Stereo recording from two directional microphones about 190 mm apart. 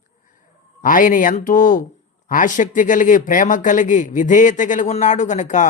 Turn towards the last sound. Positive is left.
turn(degrees=40)  # may be behind; listen again after turning